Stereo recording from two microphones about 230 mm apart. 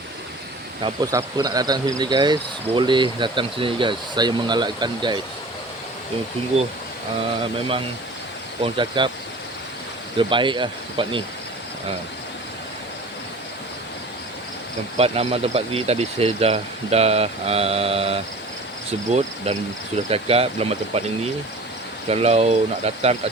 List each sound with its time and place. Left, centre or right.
0.8 s speech: centre
8.6 s speech: right
10.2 s speech: right
14.9 s speech: right
20.1 s speech: right
22.1 s speech: right